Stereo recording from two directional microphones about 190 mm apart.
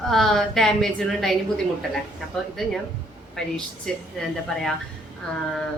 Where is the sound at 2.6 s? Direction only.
Centre (ahead or behind).